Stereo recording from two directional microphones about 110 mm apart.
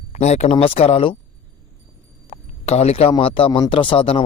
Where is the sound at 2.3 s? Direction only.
75° left (ahead or behind); by 4.3 s 55° left (ahead or behind).